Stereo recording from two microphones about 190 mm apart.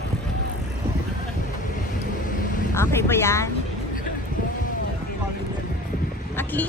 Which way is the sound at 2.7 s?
15° left (ahead or behind).